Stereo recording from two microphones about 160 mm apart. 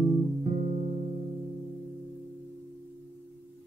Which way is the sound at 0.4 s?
50° right (ahead or behind).